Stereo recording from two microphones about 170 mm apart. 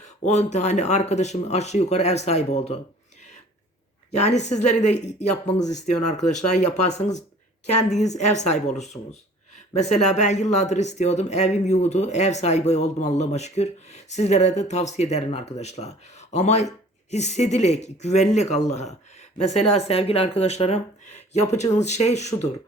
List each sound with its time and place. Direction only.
0.3 s speech: 40° left (ahead or behind)
4.1 s speech: 40° left (ahead or behind)